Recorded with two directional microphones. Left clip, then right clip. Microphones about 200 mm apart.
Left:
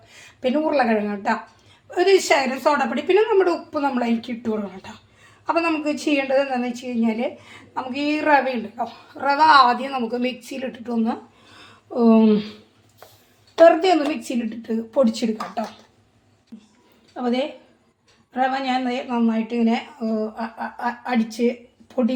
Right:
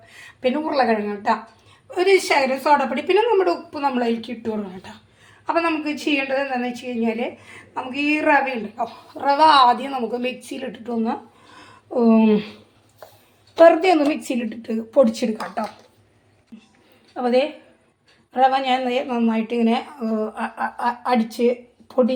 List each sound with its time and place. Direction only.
0.1 s a woman's voice: centre (ahead or behind)
13.7 s speech: centre (ahead or behind)
16.5 s a sound: centre (ahead or behind)
17.2 s a woman's voice: 5° right (ahead or behind)